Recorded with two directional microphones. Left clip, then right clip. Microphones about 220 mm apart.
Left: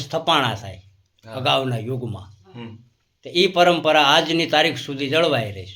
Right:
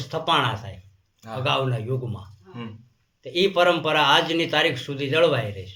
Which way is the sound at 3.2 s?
50° left (ahead or behind).